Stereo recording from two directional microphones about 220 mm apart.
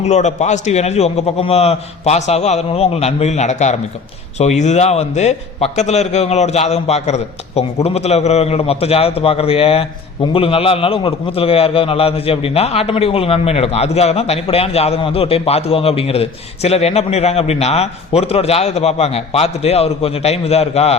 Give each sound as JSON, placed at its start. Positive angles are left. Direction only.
{"t": 0.0, "sound": "a man's voice", "side_deg": 30}